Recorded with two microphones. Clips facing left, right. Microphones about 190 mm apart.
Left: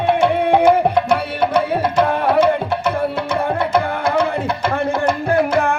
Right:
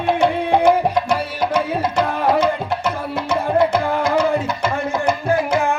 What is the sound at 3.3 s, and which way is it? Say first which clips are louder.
Tabla: right 4 dB; 60° left (ahead or behind).